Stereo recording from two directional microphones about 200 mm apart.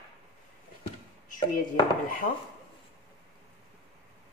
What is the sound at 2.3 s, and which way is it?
Speech, 35° left (ahead or behind).